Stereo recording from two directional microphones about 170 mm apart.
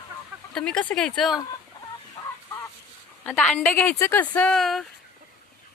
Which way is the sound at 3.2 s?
5° left (ahead or behind).